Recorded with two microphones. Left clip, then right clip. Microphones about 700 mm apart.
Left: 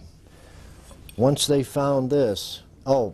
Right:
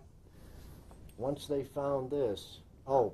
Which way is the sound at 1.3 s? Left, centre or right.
Left.